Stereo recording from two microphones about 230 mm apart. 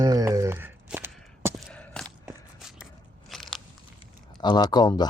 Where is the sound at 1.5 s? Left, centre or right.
Centre.